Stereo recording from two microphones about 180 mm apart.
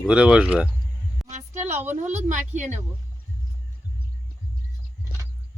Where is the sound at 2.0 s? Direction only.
40° right (ahead or behind).